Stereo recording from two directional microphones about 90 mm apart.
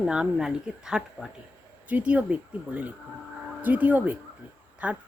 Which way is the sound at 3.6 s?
20° right (ahead or behind).